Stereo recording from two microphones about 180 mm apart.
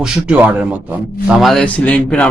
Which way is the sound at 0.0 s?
5° right (ahead or behind).